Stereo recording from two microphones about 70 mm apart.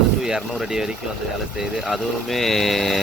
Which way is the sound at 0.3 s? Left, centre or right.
Centre.